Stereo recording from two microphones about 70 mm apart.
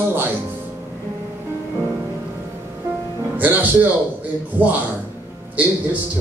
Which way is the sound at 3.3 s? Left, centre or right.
Right.